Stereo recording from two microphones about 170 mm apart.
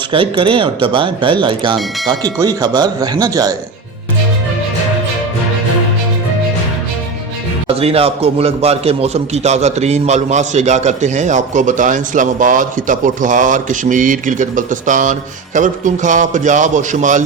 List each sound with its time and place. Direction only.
0.1 s speech: 30° right (ahead or behind)
7.7 s a man's voice: 35° right (ahead or behind)